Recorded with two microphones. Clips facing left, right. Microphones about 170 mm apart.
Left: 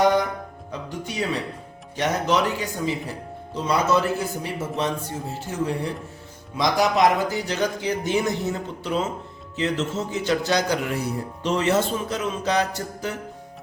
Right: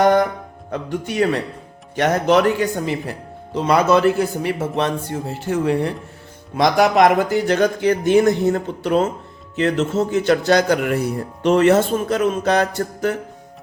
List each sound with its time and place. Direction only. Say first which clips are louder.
0.0 s music: right 5 dB; 55° right (ahead or behind)
0.7 s speech: right 8 dB; 60° right (ahead or behind)